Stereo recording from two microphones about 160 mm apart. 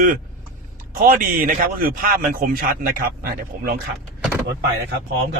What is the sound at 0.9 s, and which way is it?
A man's voice, 60° right (ahead or behind).